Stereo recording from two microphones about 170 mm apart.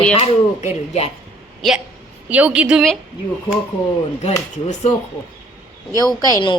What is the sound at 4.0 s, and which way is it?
Speech, 40° left (ahead or behind).